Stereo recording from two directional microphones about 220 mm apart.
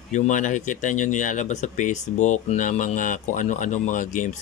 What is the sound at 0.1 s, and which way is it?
Speech, 35° left (ahead or behind).